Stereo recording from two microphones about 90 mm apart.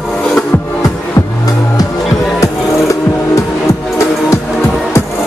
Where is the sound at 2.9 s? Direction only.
35° left (ahead or behind).